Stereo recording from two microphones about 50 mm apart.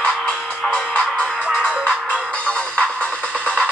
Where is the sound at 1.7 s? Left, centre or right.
Right.